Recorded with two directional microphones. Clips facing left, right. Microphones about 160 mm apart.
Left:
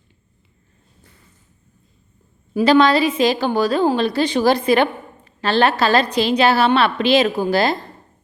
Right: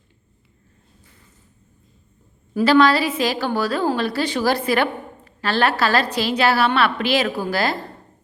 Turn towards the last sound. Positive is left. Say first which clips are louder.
# left 4 dB
turn(degrees=20)  # may be behind; listen again after turning